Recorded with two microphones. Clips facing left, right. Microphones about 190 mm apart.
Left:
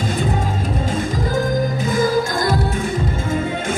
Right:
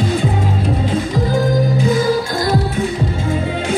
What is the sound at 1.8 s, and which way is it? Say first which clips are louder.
Music: right 3 dB; 50° left (ahead or behind).